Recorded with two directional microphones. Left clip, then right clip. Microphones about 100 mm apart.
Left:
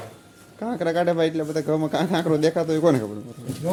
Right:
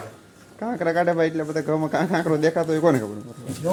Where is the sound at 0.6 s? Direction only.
10° left (ahead or behind).